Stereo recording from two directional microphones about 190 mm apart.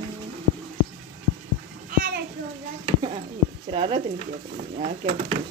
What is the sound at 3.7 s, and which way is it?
Speech, 30° right (ahead or behind).